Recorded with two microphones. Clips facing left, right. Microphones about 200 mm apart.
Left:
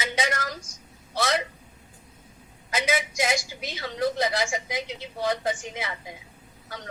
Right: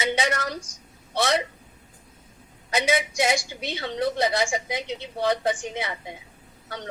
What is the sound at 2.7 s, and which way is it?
A woman's voice, 30° right (ahead or behind).